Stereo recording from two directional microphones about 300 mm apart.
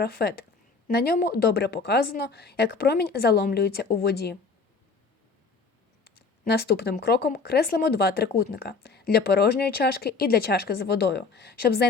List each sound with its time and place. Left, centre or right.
0.0 s speech: left
6.1 s speech: left